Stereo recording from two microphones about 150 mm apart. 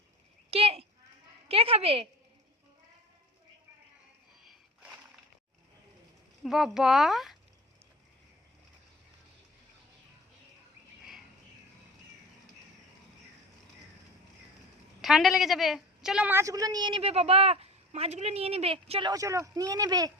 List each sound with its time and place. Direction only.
0.5 s a sound: 40° right (ahead or behind)
1.5 s a woman's voice: 40° right (ahead or behind)
6.4 s speech: centre (ahead or behind)
15.0 s a woman's voice: centre (ahead or behind); by 19.1 s 35° right (ahead or behind)
19.1 s speech: 20° right (ahead or behind)